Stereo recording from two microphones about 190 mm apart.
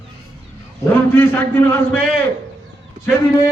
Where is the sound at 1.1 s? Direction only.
10° left (ahead or behind).